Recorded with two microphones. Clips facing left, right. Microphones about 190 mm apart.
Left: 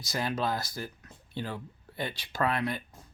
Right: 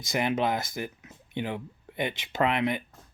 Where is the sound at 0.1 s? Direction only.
20° right (ahead or behind).